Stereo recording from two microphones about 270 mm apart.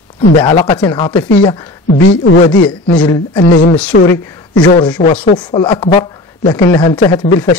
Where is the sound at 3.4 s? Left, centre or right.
Left.